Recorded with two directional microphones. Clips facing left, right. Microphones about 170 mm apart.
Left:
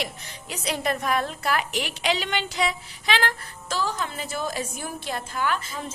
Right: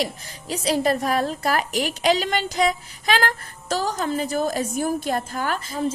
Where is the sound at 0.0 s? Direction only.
35° right (ahead or behind).